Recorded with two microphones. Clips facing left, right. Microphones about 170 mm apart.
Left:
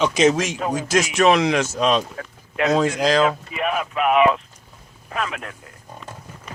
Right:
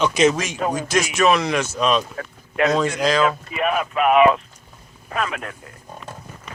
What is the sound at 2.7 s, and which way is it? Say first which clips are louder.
Speech: left 5 dB; 35° left (ahead or behind).